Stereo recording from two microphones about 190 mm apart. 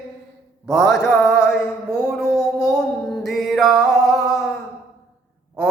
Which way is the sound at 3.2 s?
Centre (ahead or behind).